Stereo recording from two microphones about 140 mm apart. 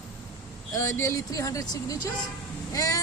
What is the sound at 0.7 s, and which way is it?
A woman's voice, 20° left (ahead or behind).